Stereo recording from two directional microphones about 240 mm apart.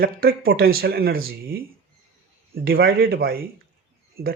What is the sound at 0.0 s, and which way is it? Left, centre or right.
Speech, right.